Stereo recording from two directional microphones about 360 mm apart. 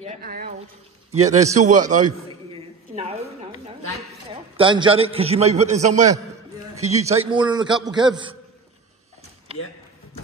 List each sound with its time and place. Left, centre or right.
0.0 s a man's voice: right
3.0 s a sound: centre
4.3 s a man's voice: centre
9.5 s speech: centre